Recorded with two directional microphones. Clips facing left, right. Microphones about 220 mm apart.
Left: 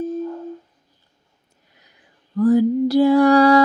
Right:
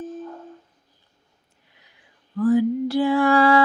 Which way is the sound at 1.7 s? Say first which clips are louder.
Left 3 dB; 40° left (ahead or behind).